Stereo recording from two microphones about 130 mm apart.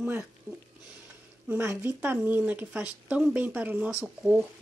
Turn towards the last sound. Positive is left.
turn(degrees=-10)  # may be behind; listen again after turning